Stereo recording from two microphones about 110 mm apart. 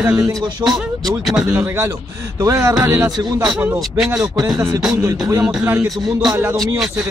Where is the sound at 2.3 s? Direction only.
30° right (ahead or behind).